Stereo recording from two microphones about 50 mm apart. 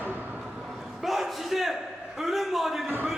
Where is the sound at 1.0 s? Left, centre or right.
Centre.